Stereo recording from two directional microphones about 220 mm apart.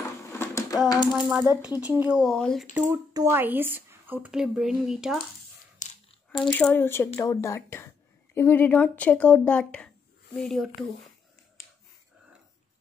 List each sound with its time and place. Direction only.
0.3 s a sound: 10° left (ahead or behind)
0.8 s typewriter: 20° left (ahead or behind)
1.3 s speech: 10° right (ahead or behind)
2.7 s speech: 15° right (ahead or behind)
5.8 s a sound: 35° left (ahead or behind)
6.4 s speech: 5° left (ahead or behind)